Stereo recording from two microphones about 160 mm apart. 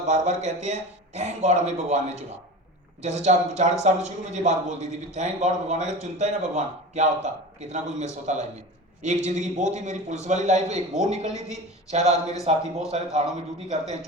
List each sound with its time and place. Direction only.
0.1 s a man's voice: 45° right (ahead or behind)